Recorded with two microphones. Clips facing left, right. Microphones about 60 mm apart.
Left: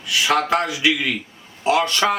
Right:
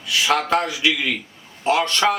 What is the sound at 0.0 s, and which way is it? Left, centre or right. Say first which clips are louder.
A man's voice: left 1 dB; centre.